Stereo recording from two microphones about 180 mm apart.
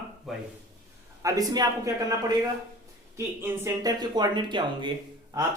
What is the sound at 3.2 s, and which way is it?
Speech, 15° right (ahead or behind).